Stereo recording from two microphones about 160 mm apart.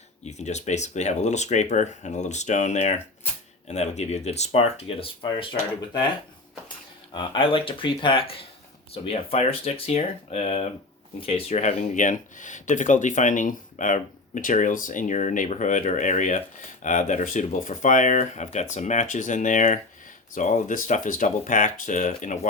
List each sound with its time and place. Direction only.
0.3 s speech: 45° left (ahead or behind)
7.1 s speech: 30° left (ahead or behind)
11.8 s speech: 50° left (ahead or behind)